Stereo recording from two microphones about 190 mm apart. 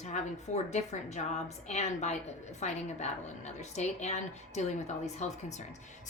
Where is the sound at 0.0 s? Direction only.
35° left (ahead or behind).